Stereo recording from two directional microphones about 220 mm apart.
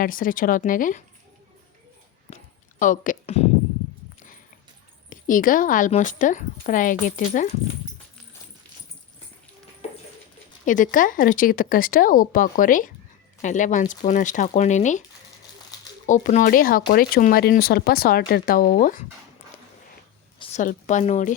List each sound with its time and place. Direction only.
0.0 s a woman's voice: 40° left (ahead or behind)
2.3 s a sound: 35° left (ahead or behind)
5.0 s a woman's voice: 40° left (ahead or behind)
10.7 s a woman's voice: 35° left (ahead or behind)
16.0 s a woman's voice: 35° left (ahead or behind)
20.4 s a woman's voice: 35° left (ahead or behind)